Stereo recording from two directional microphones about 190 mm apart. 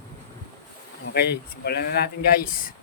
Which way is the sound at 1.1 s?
60° left (ahead or behind).